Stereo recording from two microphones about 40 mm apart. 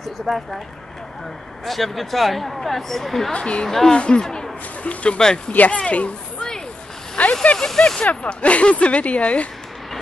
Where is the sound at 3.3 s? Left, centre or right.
Left.